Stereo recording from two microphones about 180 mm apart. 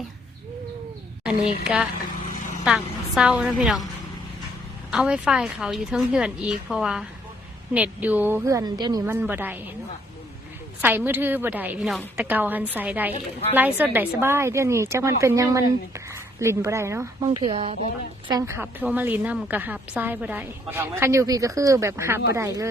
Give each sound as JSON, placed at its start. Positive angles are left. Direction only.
{"t": 1.6, "sound": "a woman's voice", "side_deg": -5}
{"t": 4.9, "sound": "a woman's voice", "side_deg": -5}
{"t": 9.0, "sound": "a woman's voice", "side_deg": -10}
{"t": 10.8, "sound": "a woman's voice", "side_deg": -10}
{"t": 18.3, "sound": "a woman's voice", "side_deg": -20}